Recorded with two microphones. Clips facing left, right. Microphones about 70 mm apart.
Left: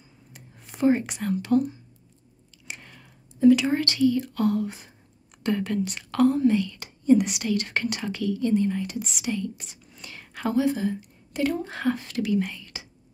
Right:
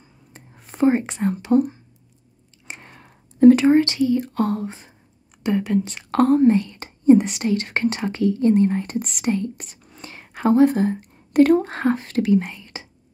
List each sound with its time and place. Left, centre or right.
0.3 s whispering: right
2.7 s chewing: right
3.3 s a sound: right
3.7 s speech: right
5.4 s a woman's voice: centre
6.1 s speech: right
10.0 s a sound: right
10.4 s a woman's voice: right
11.8 s speech: right